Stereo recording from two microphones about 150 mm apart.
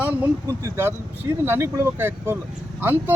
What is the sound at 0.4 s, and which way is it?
Speech, 20° right (ahead or behind).